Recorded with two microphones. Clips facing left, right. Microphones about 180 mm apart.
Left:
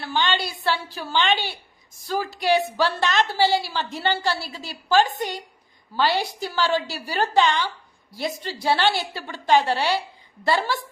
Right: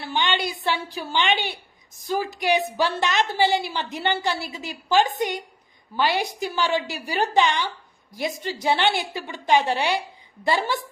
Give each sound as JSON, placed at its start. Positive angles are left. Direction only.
{"t": 0.0, "sound": "a woman's voice", "side_deg": -20}